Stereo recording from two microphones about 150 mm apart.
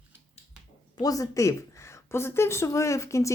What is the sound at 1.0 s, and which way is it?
Speech, 25° left (ahead or behind).